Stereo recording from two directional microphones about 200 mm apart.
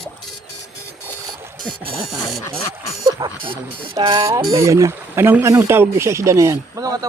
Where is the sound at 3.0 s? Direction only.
20° right (ahead or behind).